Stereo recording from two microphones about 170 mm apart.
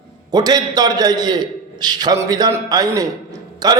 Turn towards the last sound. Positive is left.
turn(degrees=-25)  # may be behind; listen again after turning